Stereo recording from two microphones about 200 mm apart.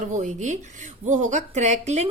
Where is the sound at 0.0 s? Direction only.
40° right (ahead or behind).